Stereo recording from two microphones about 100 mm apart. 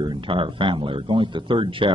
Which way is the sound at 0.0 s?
55° right (ahead or behind).